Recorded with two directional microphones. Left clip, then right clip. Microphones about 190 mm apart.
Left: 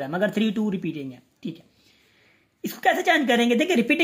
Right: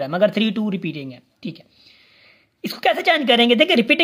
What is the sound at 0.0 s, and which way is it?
Speech, 30° right (ahead or behind).